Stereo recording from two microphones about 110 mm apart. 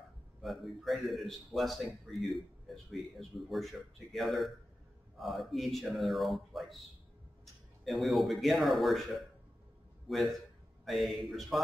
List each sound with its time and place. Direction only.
0.4 s a man's voice: centre (ahead or behind)
7.8 s a man's voice: centre (ahead or behind)